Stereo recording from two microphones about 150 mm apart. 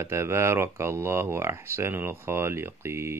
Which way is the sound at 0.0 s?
15° right (ahead or behind).